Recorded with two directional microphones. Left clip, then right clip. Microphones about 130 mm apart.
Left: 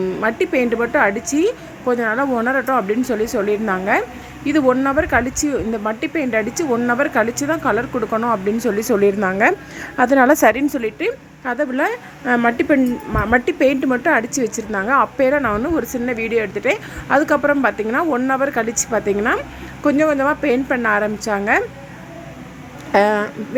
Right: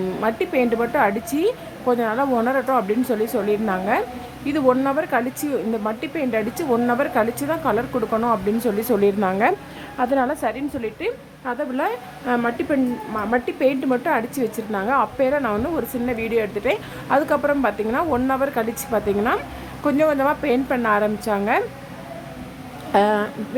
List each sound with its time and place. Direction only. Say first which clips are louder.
0.2 s a woman's voice: left 2 dB; 15° left (ahead or behind)
10.0 s a woman's voice: left 6 dB; 30° left (ahead or behind)
10.2 s a woman's voice: left 11 dB; 55° left (ahead or behind)
10.8 s a woman's voice: left 5 dB; 30° left (ahead or behind)
13.1 s a woman's voice: left 6 dB; 30° left (ahead or behind); by 21.6 s 10° left (ahead or behind)
22.9 s speech: left 3 dB; 15° left (ahead or behind)